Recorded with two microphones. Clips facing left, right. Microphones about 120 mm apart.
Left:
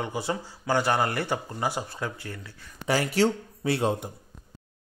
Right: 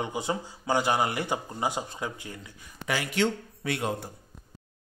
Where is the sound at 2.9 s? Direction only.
35° left (ahead or behind).